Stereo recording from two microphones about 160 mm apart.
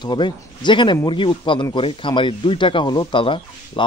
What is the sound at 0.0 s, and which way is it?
A man's voice, 25° left (ahead or behind).